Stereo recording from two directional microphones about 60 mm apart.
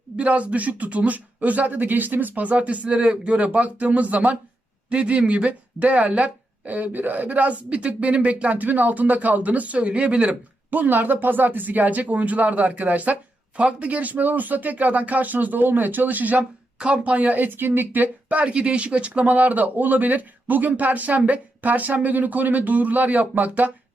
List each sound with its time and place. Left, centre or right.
0.2 s speech: right